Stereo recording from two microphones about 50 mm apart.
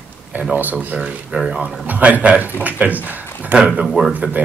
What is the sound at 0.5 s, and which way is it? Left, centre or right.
Speech, right.